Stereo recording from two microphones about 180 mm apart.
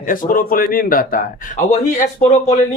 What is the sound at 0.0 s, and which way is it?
Speech, 50° left (ahead or behind).